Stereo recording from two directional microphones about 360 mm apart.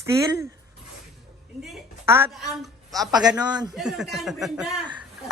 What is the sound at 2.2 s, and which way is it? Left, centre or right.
Speech, centre.